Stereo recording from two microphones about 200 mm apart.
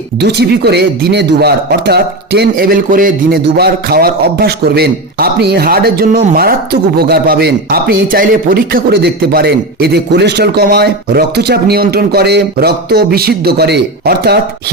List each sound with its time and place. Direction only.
0.2 s speech: 55° right (ahead or behind)